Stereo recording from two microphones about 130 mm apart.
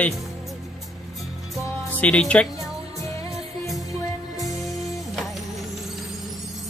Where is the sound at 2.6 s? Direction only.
25° left (ahead or behind).